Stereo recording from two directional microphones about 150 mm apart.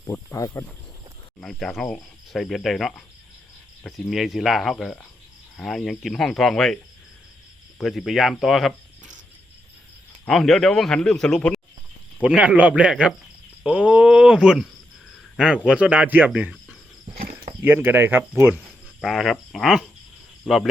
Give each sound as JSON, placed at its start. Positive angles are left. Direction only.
{"t": 0.3, "sound": "speech", "side_deg": 20}
{"t": 1.4, "sound": "speech", "side_deg": 5}
{"t": 4.1, "sound": "speech", "side_deg": 0}
{"t": 7.8, "sound": "speech", "side_deg": 0}
{"t": 10.2, "sound": "speech", "side_deg": 0}
{"t": 12.2, "sound": "speech", "side_deg": -10}
{"t": 19.0, "sound": "speech", "side_deg": 0}